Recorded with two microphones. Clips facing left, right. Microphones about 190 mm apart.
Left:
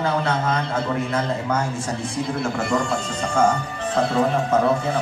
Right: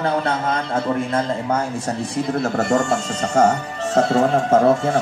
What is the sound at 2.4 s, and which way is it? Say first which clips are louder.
Speech: right 4 dB; 45° right (ahead or behind).